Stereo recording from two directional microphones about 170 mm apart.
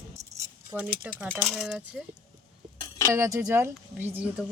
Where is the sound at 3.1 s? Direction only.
15° right (ahead or behind).